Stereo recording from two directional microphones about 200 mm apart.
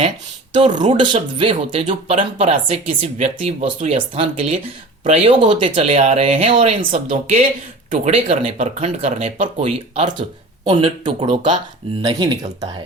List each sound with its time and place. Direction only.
0.5 s speech: 20° right (ahead or behind)
7.9 s speech: 35° right (ahead or behind)